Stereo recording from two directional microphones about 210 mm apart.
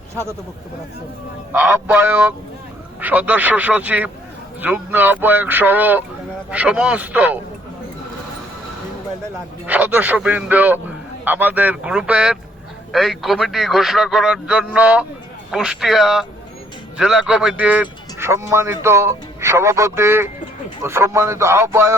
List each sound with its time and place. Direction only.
1.5 s speech: 5° right (ahead or behind)
9.6 s a man's voice: 10° right (ahead or behind)